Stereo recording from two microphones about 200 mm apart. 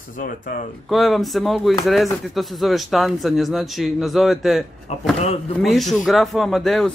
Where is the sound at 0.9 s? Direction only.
Centre (ahead or behind).